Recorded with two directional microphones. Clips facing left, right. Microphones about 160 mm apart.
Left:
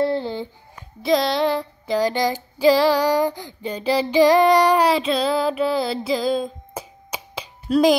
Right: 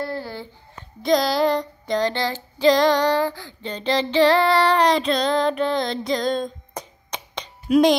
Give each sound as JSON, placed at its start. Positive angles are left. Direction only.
{"t": 0.0, "sound": "a sound", "side_deg": 25}
{"t": 1.0, "sound": "child singing", "side_deg": 0}
{"t": 7.7, "sound": "speech", "side_deg": -10}